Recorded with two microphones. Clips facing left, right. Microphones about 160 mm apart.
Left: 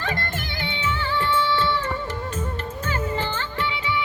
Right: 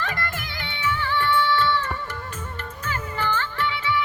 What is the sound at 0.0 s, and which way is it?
Music, 25° left (ahead or behind).